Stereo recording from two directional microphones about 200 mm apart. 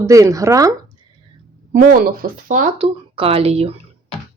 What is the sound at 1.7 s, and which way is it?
Speech, 45° right (ahead or behind).